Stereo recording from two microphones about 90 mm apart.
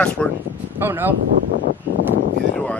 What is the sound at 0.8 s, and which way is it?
Speech, 25° right (ahead or behind).